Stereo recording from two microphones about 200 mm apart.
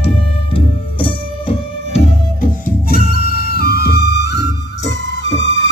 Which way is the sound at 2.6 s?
50° left (ahead or behind).